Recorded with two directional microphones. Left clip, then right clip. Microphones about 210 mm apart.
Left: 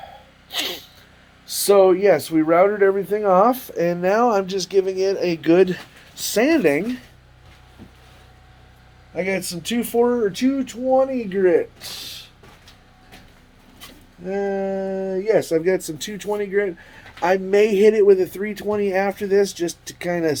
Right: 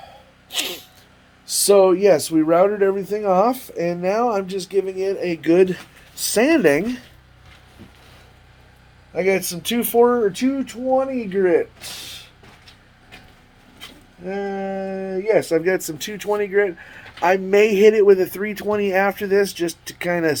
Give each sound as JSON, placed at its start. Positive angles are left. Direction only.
{"t": 0.5, "sound": "sneeze", "side_deg": -10}
{"t": 1.5, "sound": "speech", "side_deg": -10}
{"t": 5.4, "sound": "speech", "side_deg": 0}
{"t": 9.1, "sound": "speech", "side_deg": -25}
{"t": 10.3, "sound": "speech", "side_deg": 0}
{"t": 14.3, "sound": "speech", "side_deg": 0}